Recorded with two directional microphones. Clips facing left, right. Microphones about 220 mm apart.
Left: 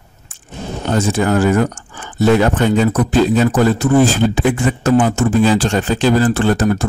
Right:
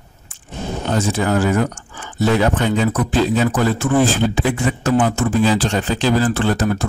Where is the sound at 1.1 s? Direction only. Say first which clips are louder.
Left 4 dB; 50° left (ahead or behind).